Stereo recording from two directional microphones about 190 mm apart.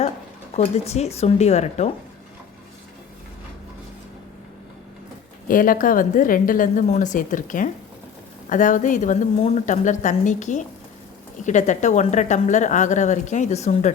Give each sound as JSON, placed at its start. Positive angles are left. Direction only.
{"t": 0.5, "sound": "a woman's voice", "side_deg": 35}
{"t": 5.5, "sound": "a woman's voice", "side_deg": 45}